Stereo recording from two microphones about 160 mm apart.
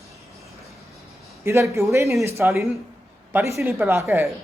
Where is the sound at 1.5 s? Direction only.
20° right (ahead or behind).